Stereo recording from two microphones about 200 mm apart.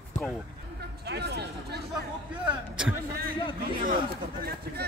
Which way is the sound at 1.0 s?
55° right (ahead or behind).